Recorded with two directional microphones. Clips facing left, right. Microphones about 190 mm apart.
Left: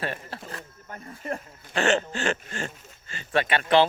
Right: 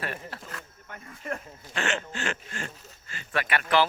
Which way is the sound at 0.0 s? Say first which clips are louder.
Left 3 dB; 30° left (ahead or behind).